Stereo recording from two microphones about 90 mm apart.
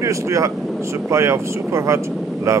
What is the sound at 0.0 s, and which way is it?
Speech, 35° right (ahead or behind).